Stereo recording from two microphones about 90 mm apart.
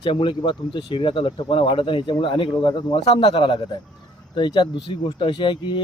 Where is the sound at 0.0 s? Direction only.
70° left (ahead or behind).